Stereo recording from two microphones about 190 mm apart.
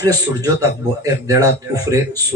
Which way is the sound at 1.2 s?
15° right (ahead or behind).